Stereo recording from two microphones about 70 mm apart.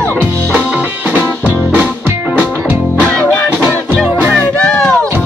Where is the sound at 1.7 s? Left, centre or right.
Right.